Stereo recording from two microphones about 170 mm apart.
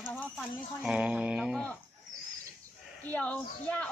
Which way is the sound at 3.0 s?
10° left (ahead or behind).